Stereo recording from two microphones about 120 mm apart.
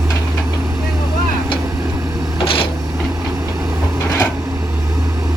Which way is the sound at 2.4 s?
50° left (ahead or behind).